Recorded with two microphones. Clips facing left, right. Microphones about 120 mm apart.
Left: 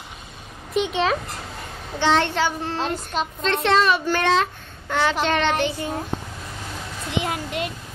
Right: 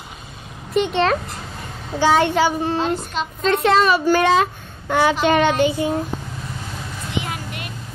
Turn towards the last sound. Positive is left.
turn(degrees=20)  # may be behind; listen again after turning